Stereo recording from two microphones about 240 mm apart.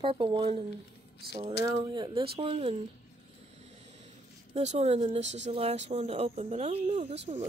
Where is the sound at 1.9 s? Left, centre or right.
Centre.